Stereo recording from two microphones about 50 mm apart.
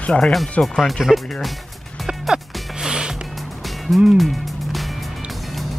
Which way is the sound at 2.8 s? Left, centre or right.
Centre.